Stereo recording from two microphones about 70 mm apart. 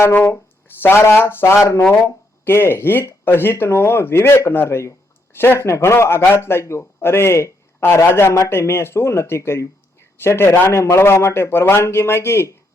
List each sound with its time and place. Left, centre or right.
0.3 s speech: left